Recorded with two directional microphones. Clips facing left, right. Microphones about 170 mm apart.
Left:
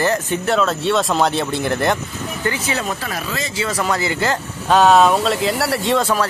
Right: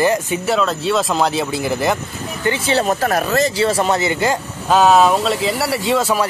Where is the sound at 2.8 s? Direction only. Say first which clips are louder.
Right 8 dB; 50° right (ahead or behind); by 4.3 s 20° right (ahead or behind).